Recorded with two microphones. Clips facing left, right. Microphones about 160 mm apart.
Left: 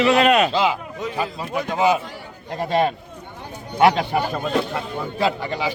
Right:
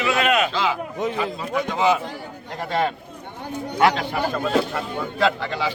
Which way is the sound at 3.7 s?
20° left (ahead or behind).